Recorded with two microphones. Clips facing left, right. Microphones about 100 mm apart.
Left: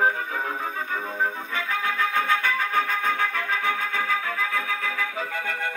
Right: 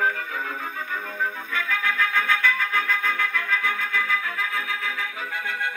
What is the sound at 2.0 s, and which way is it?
Music, 45° left (ahead or behind).